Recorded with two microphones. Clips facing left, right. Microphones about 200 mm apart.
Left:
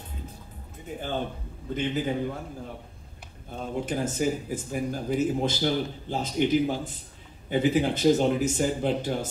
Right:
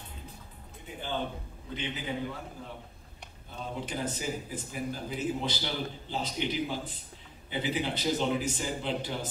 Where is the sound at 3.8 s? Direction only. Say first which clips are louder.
Left 8 dB; 45° left (ahead or behind).